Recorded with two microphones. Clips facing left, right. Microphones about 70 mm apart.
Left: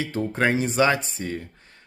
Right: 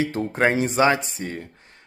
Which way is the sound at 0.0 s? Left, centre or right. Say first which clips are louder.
Right 2 dB; right.